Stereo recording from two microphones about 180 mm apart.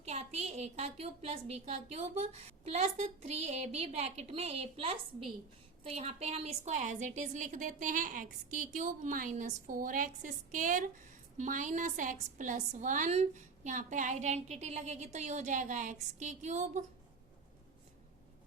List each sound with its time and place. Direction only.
0.0 s a woman's voice: 35° right (ahead or behind)